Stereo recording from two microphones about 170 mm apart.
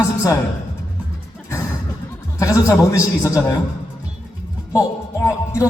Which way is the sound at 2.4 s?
20° left (ahead or behind).